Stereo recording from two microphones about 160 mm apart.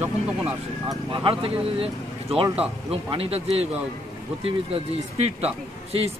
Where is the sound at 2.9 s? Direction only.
35° right (ahead or behind).